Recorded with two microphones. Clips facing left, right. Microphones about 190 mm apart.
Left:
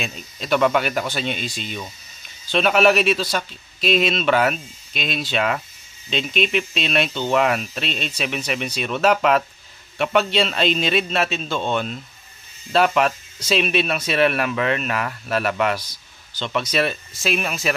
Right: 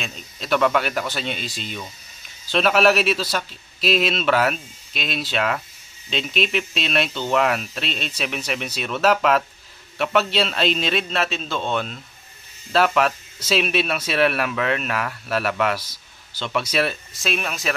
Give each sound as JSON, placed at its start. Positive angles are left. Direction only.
{"t": 0.0, "sound": "speech", "side_deg": 5}